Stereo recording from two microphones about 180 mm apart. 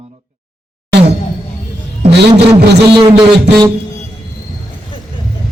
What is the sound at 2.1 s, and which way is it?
Speech, 65° right (ahead or behind).